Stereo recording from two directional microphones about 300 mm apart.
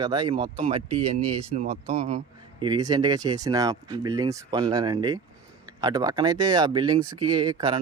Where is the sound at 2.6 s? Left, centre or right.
Centre.